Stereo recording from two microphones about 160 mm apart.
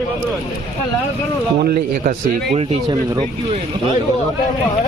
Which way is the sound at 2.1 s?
45° right (ahead or behind).